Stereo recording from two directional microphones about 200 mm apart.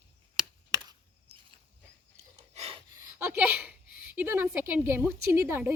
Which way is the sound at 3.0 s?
10° right (ahead or behind).